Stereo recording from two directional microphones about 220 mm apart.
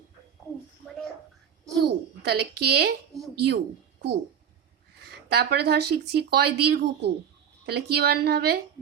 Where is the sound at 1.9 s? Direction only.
50° right (ahead or behind).